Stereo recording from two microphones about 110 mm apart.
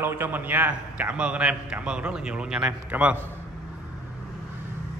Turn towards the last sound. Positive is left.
turn(degrees=-10)  # may be behind; listen again after turning